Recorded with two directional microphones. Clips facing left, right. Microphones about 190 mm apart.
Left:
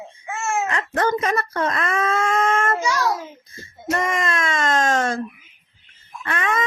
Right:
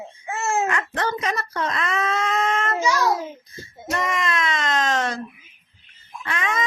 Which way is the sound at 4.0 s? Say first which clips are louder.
Left 1 dB; 50° left (ahead or behind).